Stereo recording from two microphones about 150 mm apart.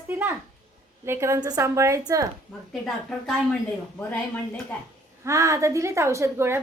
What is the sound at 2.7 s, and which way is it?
Speech, centre (ahead or behind).